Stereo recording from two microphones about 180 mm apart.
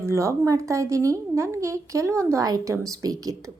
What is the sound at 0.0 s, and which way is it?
A woman's voice, 15° right (ahead or behind).